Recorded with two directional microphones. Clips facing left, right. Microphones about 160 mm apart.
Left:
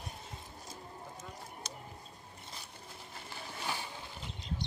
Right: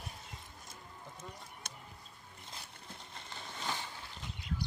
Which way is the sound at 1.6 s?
55° right (ahead or behind).